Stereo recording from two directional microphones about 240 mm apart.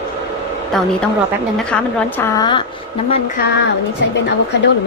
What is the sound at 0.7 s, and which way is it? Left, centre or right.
A woman's voice, centre.